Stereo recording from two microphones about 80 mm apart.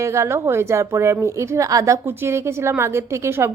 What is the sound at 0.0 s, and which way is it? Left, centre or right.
A woman's voice, right.